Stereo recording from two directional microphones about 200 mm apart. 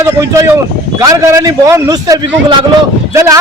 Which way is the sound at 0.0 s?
15° right (ahead or behind).